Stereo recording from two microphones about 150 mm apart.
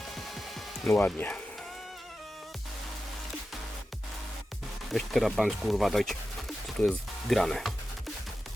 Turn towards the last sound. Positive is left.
turn(degrees=0)  # may be behind; listen again after turning